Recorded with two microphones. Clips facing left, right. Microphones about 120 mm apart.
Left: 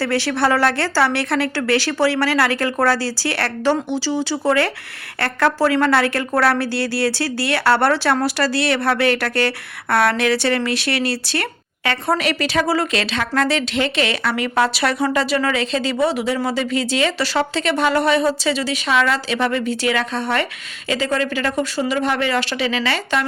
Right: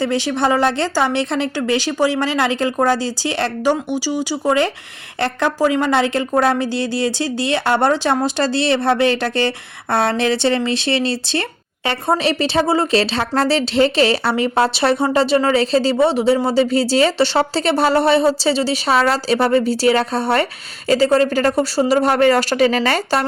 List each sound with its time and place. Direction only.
0.0 s a woman's voice: 20° right (ahead or behind); by 23.2 s 45° right (ahead or behind)